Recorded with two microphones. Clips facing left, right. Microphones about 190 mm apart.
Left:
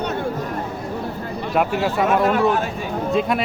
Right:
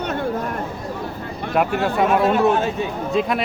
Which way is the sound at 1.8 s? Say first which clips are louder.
Right 1 dB; centre (ahead or behind).